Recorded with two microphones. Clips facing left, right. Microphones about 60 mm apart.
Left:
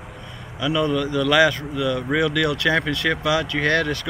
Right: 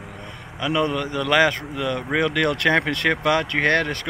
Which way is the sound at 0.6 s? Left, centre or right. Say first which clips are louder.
Left 1 dB; right.